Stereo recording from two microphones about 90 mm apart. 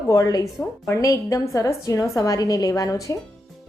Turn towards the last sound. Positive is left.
turn(degrees=40)  # may be behind; listen again after turning